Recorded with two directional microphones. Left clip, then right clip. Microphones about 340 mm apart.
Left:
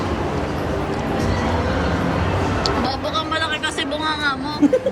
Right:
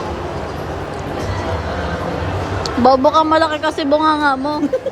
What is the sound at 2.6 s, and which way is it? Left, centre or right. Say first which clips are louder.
Speech: right 9 dB; centre.